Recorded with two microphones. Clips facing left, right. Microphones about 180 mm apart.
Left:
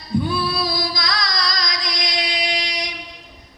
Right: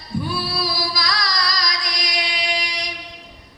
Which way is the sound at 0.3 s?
20° left (ahead or behind).